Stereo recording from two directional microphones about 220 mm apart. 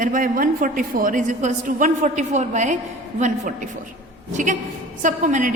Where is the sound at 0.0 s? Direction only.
40° right (ahead or behind).